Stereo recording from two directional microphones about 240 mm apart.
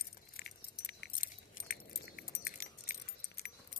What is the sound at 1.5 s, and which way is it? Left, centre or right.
Keys jangling, left.